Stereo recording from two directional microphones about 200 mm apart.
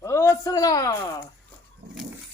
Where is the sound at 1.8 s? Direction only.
55° right (ahead or behind).